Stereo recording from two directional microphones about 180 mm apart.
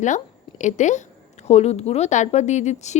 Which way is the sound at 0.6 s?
40° left (ahead or behind).